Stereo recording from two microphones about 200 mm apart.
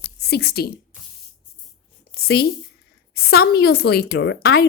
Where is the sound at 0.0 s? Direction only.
55° left (ahead or behind).